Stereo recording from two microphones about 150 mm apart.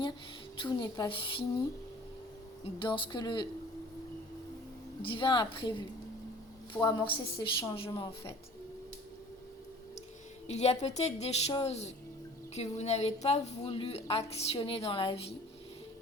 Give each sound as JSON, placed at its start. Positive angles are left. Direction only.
{"t": 0.5, "sound": "a woman's voice", "side_deg": 30}
{"t": 2.8, "sound": "a woman's voice", "side_deg": 30}
{"t": 5.1, "sound": "a woman's voice", "side_deg": 30}
{"t": 6.8, "sound": "a woman's voice", "side_deg": 35}
{"t": 7.6, "sound": "a woman's voice", "side_deg": 20}
{"t": 7.9, "sound": "a woman's voice", "side_deg": 35}
{"t": 10.4, "sound": "a woman's voice", "side_deg": 45}